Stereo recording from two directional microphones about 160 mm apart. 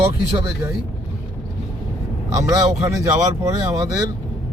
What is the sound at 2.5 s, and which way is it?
Speech, 20° right (ahead or behind).